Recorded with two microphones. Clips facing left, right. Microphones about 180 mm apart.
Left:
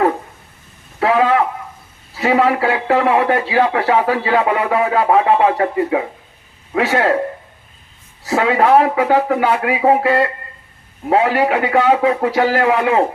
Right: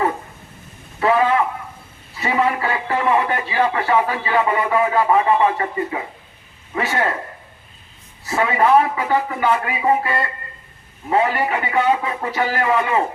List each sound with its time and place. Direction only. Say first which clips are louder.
0.9 s a man's voice: left 2 dB; 85° left
3.8 s a man's voice: left 4 dB; 85° left; by 6.1 s 70° left (ahead or behind)
6.7 s a man's voice: left 6 dB; 85° left
8.2 s a man's voice: left 4 dB; 85° left